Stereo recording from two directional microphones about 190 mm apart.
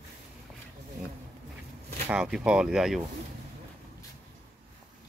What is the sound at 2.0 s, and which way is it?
Speech, 5° right (ahead or behind).